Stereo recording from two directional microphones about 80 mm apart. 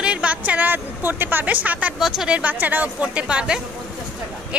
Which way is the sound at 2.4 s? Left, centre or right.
Right.